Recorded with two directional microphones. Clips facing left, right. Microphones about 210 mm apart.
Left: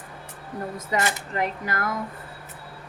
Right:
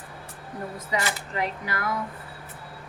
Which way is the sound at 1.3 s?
45° left (ahead or behind).